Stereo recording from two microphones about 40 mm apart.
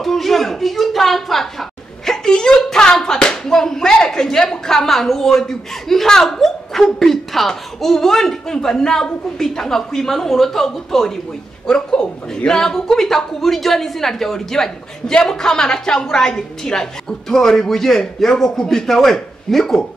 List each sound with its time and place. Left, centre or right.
0.0 s a woman's voice: centre